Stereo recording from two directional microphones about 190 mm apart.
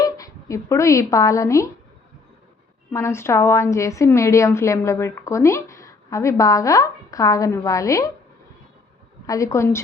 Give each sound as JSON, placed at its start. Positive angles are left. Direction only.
{"t": 0.0, "sound": "speech", "side_deg": 20}
{"t": 2.9, "sound": "a woman's voice", "side_deg": 15}
{"t": 9.2, "sound": "a woman's voice", "side_deg": 15}